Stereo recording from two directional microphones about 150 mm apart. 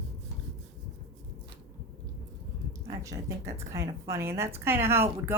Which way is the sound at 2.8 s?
20° right (ahead or behind).